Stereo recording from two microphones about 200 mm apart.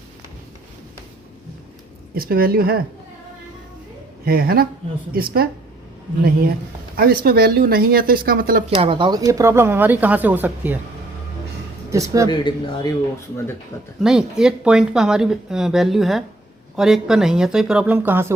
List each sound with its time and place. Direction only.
2.1 s speech: 45° right (ahead or behind)
4.3 s speech: 50° right (ahead or behind)
6.9 s speech: 50° right (ahead or behind)
8.8 s speech: 25° right (ahead or behind); by 10.8 s 10° right (ahead or behind)
11.9 s speech: 15° right (ahead or behind)
12.3 s a man's voice: 25° left (ahead or behind)
14.0 s speech: 5° right (ahead or behind)